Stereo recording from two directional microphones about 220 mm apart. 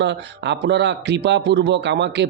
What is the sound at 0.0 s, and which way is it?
A man's voice, 55° right (ahead or behind).